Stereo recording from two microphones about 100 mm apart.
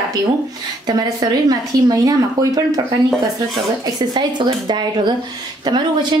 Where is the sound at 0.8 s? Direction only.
35° right (ahead or behind).